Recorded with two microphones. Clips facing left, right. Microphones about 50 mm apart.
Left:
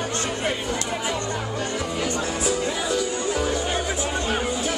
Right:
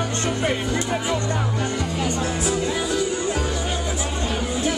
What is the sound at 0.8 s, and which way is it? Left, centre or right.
Speech, centre.